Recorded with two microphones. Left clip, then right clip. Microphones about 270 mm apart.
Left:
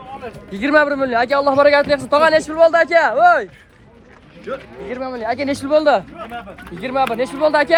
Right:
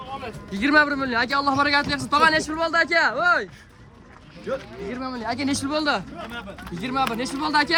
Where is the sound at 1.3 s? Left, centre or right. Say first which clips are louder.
Left 9 dB; centre.